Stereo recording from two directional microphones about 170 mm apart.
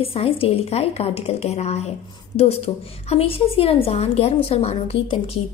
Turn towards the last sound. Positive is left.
turn(degrees=35)  # may be behind; listen again after turning